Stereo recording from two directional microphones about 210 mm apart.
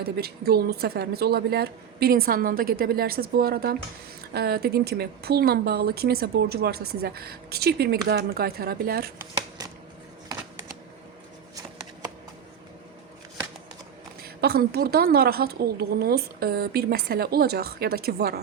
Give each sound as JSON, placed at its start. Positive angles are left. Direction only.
{"t": 0.0, "sound": "a woman's voice", "side_deg": -50}
{"t": 14.2, "sound": "a woman's voice", "side_deg": -50}